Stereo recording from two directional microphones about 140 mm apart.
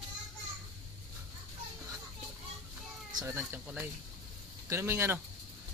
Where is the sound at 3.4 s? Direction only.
15° right (ahead or behind).